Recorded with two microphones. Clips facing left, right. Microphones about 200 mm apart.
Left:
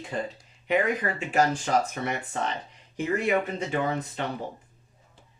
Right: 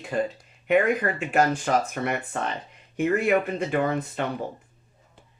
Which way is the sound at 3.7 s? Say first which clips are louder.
Right 4 dB; 55° right (ahead or behind).